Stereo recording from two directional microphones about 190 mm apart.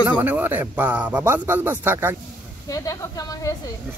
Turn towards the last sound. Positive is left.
turn(degrees=20)  # may be behind; listen again after turning